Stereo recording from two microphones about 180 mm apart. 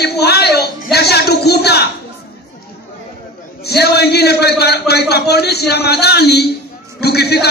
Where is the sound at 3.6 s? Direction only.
65° left (ahead or behind).